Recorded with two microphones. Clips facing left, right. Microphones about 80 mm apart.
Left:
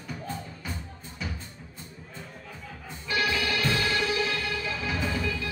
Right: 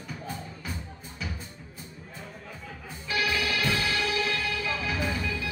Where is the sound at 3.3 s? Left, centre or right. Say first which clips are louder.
Even; centre.